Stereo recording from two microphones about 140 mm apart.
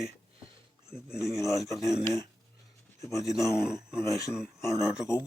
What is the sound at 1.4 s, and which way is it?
Speech, 20° left (ahead or behind).